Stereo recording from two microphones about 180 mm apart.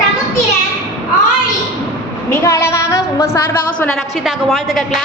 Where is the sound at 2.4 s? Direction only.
15° left (ahead or behind).